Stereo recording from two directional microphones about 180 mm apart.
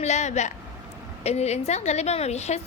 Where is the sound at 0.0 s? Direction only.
40° left (ahead or behind).